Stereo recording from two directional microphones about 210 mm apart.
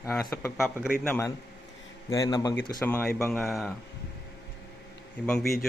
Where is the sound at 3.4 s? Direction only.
Centre (ahead or behind).